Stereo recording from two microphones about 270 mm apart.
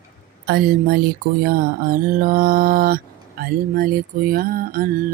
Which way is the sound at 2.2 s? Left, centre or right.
Right.